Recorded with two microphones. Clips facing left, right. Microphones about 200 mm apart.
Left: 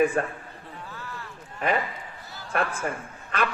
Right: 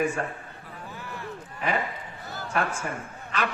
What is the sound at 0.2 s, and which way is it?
Speech, 55° left (ahead or behind).